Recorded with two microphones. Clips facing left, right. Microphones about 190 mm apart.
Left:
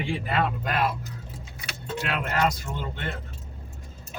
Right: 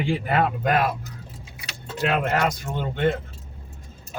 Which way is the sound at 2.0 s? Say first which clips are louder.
Right 4 dB; 45° right (ahead or behind).